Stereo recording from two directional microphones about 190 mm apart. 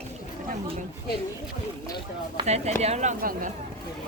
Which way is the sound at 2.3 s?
35° right (ahead or behind).